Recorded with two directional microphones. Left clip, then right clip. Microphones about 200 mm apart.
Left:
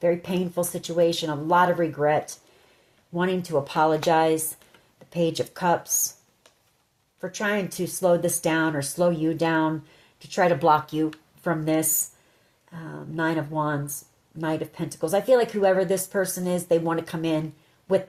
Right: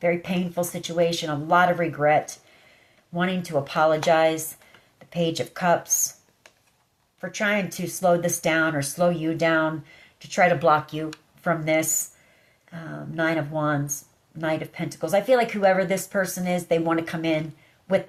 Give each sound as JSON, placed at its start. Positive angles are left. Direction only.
{"t": 0.0, "sound": "speech", "side_deg": 40}
{"t": 7.2, "sound": "speech", "side_deg": 40}